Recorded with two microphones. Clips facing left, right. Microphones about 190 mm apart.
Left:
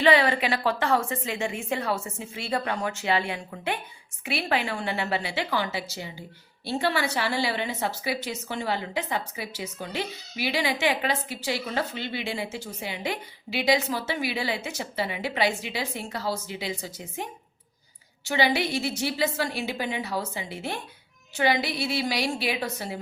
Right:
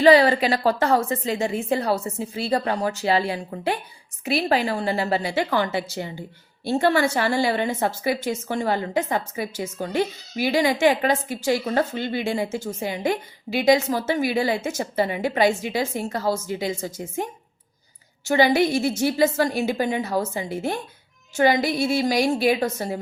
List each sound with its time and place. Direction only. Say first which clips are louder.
0.0 s a woman's voice: right 6 dB; 40° right (ahead or behind)
18.3 s a woman's voice: right 7 dB; 45° right (ahead or behind)